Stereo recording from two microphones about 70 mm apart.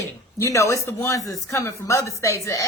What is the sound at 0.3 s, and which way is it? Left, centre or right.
A woman's voice, left.